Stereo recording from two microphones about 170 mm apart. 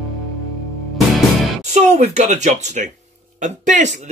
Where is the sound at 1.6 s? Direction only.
40° right (ahead or behind).